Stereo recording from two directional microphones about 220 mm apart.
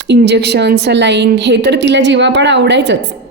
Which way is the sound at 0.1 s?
50° right (ahead or behind).